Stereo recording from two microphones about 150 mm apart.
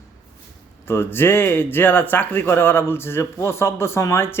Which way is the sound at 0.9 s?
15° left (ahead or behind).